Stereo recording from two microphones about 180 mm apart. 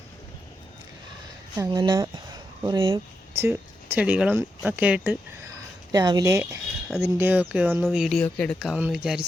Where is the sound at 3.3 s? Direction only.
10° right (ahead or behind).